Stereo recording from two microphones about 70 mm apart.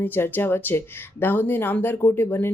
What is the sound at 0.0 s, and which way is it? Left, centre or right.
Speech, left.